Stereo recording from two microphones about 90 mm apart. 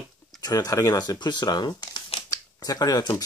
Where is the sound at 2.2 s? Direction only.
40° left (ahead or behind).